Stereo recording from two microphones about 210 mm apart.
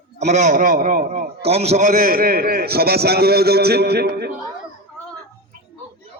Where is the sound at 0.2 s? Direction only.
35° right (ahead or behind); by 4.3 s 50° right (ahead or behind).